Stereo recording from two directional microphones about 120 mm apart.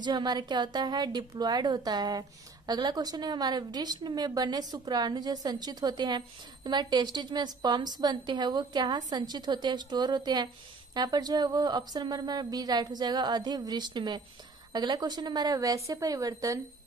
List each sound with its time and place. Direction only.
0.0 s a woman's voice: 35° right (ahead or behind)